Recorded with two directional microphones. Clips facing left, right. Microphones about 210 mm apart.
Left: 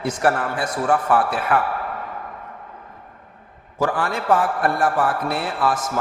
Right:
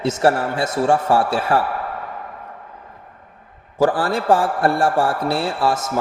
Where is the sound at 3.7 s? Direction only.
35° right (ahead or behind).